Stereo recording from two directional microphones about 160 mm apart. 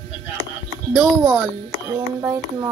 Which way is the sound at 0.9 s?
Centre (ahead or behind).